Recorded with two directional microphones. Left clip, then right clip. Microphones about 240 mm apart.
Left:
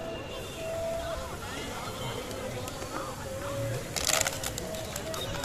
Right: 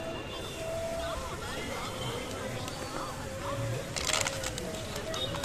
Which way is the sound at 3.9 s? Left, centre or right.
Left.